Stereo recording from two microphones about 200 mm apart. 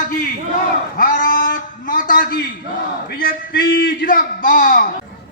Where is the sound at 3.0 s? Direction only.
45° left (ahead or behind).